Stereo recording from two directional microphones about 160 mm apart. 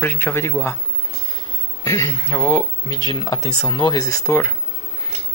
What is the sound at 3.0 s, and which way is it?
Speech, 25° left (ahead or behind).